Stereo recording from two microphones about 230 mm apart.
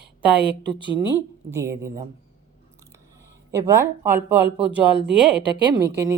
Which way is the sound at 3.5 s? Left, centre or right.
Centre.